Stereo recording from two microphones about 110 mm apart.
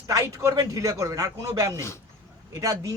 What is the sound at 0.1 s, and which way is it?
A man's voice, 30° right (ahead or behind).